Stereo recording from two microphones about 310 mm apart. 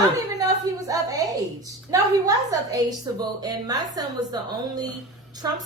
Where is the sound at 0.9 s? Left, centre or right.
Centre.